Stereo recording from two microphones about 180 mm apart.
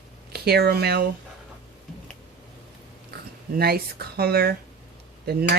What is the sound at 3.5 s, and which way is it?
Speech, 60° right (ahead or behind).